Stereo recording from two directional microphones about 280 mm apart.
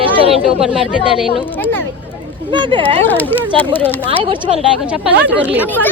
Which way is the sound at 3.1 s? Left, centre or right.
Centre.